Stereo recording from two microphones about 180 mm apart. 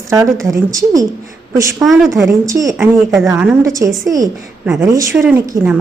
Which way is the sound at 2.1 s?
15° right (ahead or behind).